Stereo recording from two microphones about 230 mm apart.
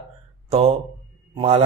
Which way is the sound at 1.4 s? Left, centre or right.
Right.